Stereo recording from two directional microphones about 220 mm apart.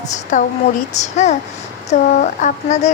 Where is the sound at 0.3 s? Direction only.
35° left (ahead or behind).